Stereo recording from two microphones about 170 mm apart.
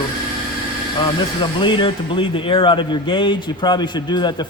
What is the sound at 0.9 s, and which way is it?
Speech, 30° left (ahead or behind).